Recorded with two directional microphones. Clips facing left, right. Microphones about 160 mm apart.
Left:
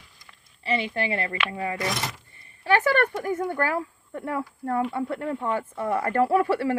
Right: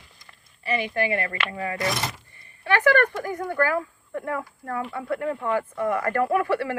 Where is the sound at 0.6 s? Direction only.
30° left (ahead or behind).